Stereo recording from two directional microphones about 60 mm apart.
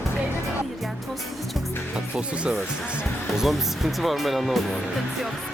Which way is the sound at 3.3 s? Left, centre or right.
Centre.